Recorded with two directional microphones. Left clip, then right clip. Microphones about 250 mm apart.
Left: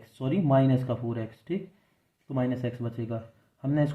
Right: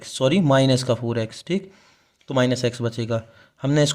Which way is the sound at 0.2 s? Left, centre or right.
Right.